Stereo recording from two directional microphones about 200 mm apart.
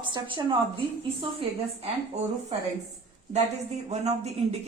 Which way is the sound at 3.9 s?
35° right (ahead or behind).